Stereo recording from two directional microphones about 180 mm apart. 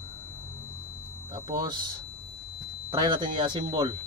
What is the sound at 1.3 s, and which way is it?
Speech, 25° right (ahead or behind).